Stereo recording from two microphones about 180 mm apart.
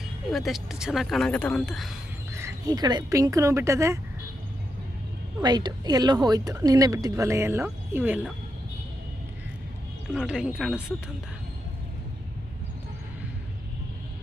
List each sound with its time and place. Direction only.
0.3 s speech: centre (ahead or behind)
2.3 s speech: 15° right (ahead or behind)
5.4 s a woman's voice: 20° right (ahead or behind)
10.2 s speech: 5° right (ahead or behind)